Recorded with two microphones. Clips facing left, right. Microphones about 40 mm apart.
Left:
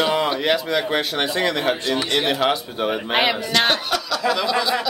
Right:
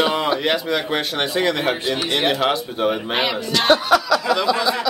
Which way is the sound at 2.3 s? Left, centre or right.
Centre.